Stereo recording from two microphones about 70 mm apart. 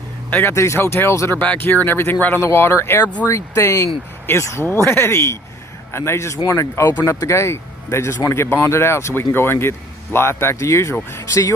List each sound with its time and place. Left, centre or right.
0.3 s speech: left
0.5 s speech: left
2.4 s speech: left